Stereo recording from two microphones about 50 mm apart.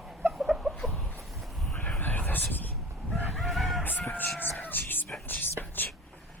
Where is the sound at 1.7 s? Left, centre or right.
Left.